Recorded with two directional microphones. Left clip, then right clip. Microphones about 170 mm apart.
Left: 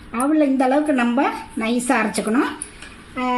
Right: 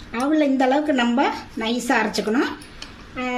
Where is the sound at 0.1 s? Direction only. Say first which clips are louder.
Left 2 dB; 30° left (ahead or behind).